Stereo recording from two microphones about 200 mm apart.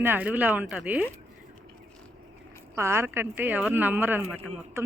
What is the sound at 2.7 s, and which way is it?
A woman's voice, 15° right (ahead or behind).